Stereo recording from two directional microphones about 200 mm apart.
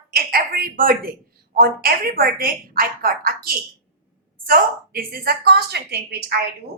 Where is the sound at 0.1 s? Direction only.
50° right (ahead or behind).